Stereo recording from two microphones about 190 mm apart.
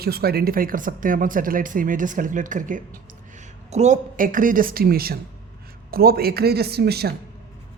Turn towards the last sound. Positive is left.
turn(degrees=-55)  # may be behind; listen again after turning